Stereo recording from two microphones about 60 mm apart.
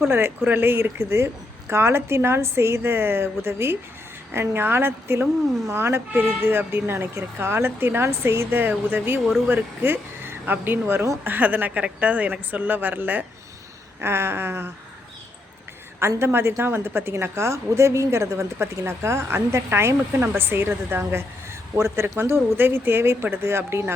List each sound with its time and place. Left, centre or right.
0.1 s a woman's voice: right
14.0 s speech: right
16.0 s a woman's voice: right
21.8 s a woman's voice: right
22.2 s speech: right